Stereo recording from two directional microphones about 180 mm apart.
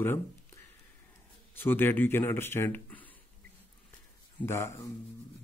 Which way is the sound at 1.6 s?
10° left (ahead or behind).